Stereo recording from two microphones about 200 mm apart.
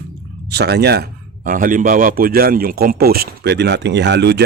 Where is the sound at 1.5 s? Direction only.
45° right (ahead or behind).